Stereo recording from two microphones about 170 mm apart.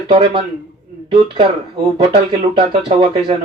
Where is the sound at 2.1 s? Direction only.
30° right (ahead or behind).